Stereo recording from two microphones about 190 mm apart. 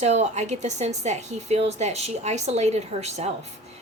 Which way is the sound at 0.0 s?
35° right (ahead or behind).